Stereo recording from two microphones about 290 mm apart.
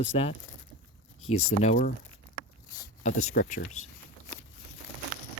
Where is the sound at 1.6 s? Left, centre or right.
Left.